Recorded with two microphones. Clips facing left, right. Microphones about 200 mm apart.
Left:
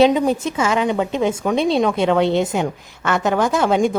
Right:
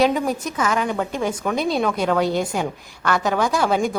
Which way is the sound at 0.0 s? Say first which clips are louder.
Left 5 dB; 25° left (ahead or behind).